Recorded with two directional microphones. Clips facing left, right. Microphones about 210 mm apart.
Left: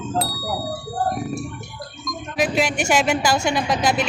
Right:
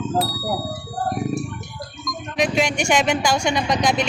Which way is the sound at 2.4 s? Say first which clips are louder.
Even; 5° left (ahead or behind).